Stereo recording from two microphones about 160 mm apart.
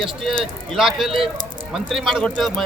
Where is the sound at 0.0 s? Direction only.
Centre (ahead or behind).